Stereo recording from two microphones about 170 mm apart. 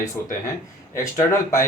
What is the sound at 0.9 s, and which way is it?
Speech, 20° left (ahead or behind).